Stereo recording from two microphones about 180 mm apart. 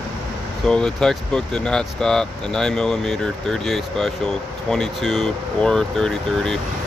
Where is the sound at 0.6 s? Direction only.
5° left (ahead or behind).